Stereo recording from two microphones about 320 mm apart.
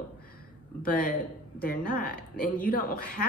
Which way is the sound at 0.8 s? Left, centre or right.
Left.